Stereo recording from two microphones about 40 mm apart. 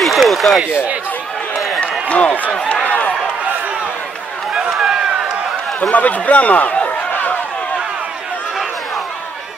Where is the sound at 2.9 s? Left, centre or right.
Left.